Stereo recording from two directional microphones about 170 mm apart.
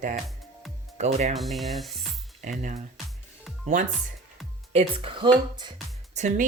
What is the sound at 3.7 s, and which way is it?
Speech, 40° right (ahead or behind).